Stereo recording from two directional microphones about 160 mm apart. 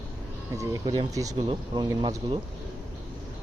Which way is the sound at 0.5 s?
20° right (ahead or behind).